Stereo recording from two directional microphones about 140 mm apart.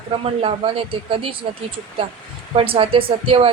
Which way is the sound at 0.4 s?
40° right (ahead or behind).